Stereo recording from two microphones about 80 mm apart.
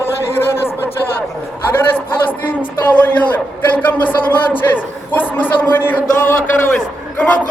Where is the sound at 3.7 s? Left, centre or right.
Left.